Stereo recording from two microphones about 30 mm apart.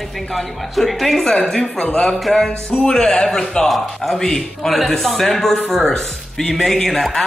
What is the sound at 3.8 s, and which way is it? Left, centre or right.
A man's voice, centre.